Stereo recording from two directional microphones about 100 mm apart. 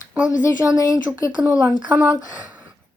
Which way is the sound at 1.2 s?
35° left (ahead or behind).